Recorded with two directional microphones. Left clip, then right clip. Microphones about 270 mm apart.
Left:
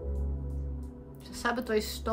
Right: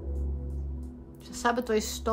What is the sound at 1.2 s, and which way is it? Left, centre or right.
Speech, centre.